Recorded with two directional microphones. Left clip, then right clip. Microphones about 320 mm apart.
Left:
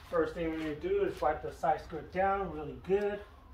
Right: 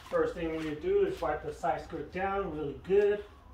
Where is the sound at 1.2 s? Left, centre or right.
Centre.